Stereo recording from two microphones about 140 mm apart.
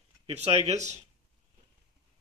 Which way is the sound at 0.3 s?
50° right (ahead or behind).